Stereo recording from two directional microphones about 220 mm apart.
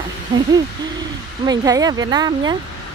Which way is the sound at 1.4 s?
15° right (ahead or behind).